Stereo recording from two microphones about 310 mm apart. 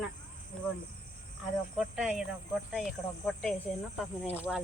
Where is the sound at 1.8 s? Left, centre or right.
Centre.